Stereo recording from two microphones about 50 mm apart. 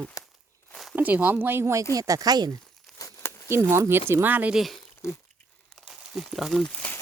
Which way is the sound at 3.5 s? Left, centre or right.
Right.